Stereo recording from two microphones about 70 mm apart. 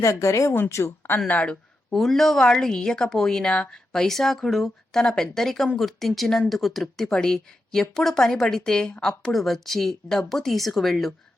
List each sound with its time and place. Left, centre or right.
0.0 s a woman's voice: left
0.5 s speech: left
1.3 s speech: centre
1.9 s a woman's voice: centre